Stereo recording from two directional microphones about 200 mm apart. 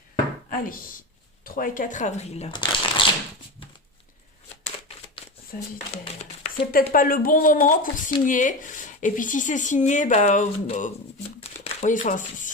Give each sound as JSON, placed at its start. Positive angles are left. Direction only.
{"t": 0.5, "sound": "speech", "side_deg": 45}
{"t": 5.5, "sound": "speech", "side_deg": 45}
{"t": 6.8, "sound": "speech", "side_deg": 45}
{"t": 11.3, "sound": "a sound", "side_deg": 30}